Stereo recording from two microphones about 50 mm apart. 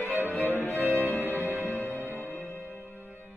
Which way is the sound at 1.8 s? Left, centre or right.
Left.